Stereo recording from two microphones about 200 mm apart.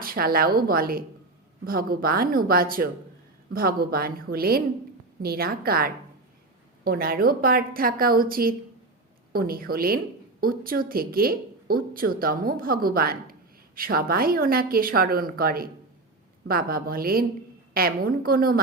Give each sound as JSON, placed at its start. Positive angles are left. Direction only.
{"t": 0.0, "sound": "a woman's voice", "side_deg": -45}